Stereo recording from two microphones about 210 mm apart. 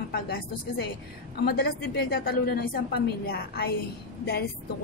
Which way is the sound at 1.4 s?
50° left (ahead or behind).